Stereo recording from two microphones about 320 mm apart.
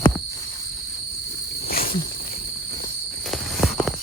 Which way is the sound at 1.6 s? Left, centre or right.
Left.